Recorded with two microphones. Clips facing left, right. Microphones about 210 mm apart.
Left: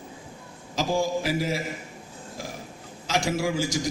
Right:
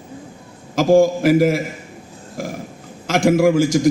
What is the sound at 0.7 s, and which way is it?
Speech, 50° right (ahead or behind).